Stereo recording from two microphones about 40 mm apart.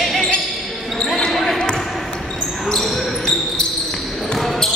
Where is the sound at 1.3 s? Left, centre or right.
Centre.